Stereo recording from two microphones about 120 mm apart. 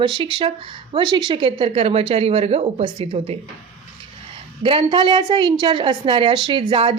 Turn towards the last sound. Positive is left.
turn(degrees=-45)  # may be behind; listen again after turning